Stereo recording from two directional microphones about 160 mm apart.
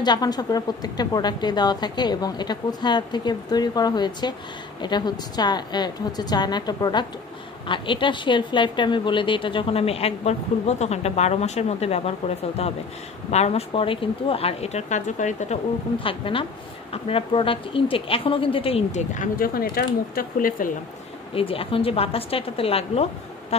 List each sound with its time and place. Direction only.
0.0 s a woman's voice: 25° left (ahead or behind); by 12.0 s 45° left (ahead or behind)
13.3 s a woman's voice: 40° left (ahead or behind); by 20.7 s 60° left (ahead or behind)
21.3 s a woman's voice: 35° left (ahead or behind)